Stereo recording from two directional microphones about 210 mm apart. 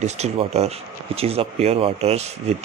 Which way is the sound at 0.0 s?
30° right (ahead or behind).